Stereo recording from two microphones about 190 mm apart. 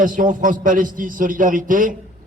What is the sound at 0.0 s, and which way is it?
A man's voice, 45° right (ahead or behind).